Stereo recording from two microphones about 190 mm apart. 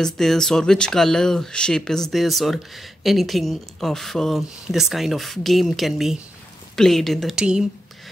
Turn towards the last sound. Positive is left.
turn(degrees=-5)  # may be behind; listen again after turning